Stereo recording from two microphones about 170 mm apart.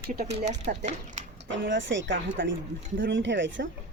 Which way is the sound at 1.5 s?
90° right.